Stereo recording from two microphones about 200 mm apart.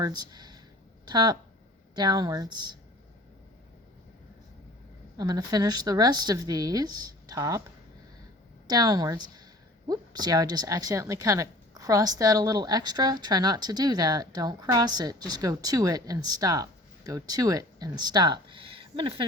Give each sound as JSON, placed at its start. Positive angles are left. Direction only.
{"t": 0.0, "sound": "a woman's voice", "side_deg": -20}
{"t": 5.1, "sound": "a woman's voice", "side_deg": -20}
{"t": 8.6, "sound": "a woman's voice", "side_deg": -20}